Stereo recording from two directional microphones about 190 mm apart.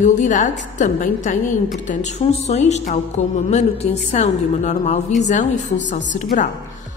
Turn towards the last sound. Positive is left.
turn(degrees=40)  # may be behind; listen again after turning